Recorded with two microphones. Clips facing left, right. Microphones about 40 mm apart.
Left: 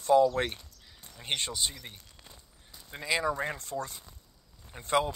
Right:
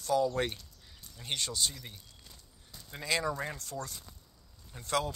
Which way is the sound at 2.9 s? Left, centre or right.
Centre.